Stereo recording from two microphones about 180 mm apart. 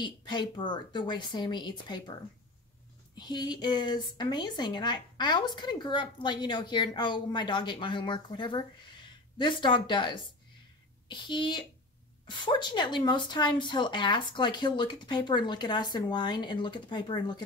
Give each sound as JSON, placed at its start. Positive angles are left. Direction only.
{"t": 0.0, "sound": "speech", "side_deg": 25}
{"t": 3.2, "sound": "speech", "side_deg": 25}